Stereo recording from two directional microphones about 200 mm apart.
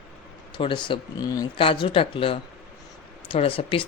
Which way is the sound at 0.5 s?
25° left (ahead or behind).